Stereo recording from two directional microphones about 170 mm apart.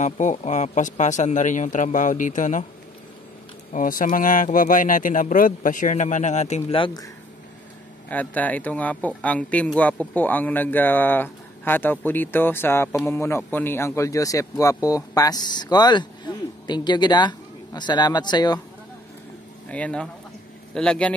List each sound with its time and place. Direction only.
0.0 s a man's voice: 45° left (ahead or behind)
3.7 s a man's voice: 50° left (ahead or behind); by 7.1 s 25° left (ahead or behind)
8.1 s speech: 10° left (ahead or behind); by 18.6 s 25° left (ahead or behind)
19.7 s speech: 5° left (ahead or behind)